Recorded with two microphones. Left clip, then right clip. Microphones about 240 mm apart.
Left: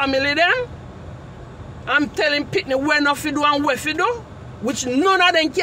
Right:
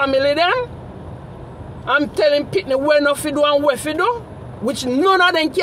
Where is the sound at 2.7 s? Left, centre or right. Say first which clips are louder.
Right 3 dB; centre.